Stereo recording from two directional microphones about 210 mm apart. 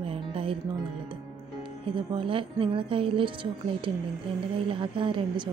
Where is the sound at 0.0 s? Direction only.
25° right (ahead or behind).